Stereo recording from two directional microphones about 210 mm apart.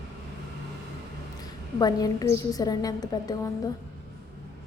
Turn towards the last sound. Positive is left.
turn(degrees=20)  # may be behind; listen again after turning